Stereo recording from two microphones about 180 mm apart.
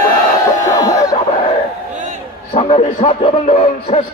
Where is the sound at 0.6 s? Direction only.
20° left (ahead or behind).